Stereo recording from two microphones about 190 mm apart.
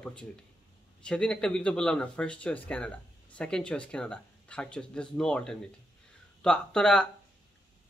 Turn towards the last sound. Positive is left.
turn(degrees=5)  # may be behind; listen again after turning